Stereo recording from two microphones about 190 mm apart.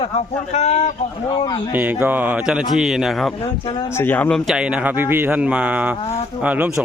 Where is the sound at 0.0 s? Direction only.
35° left (ahead or behind).